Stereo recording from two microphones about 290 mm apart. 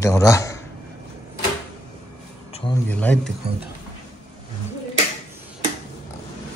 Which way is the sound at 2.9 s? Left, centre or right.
Centre.